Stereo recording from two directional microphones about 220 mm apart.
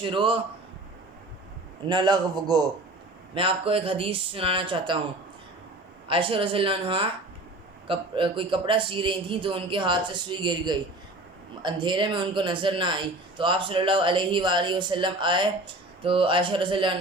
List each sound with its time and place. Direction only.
0.0 s speech: 20° right (ahead or behind)
1.9 s speech: 20° right (ahead or behind)
6.1 s speech: 25° right (ahead or behind)